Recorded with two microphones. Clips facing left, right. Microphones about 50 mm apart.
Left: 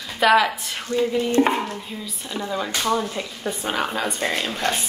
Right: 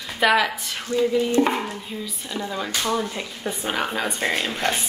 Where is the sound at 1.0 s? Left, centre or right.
Left.